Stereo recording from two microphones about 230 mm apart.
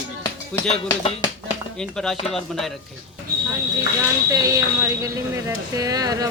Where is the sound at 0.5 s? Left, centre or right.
Centre.